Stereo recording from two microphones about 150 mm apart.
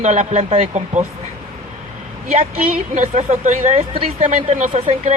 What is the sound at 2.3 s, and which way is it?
A man's voice, 45° right (ahead or behind).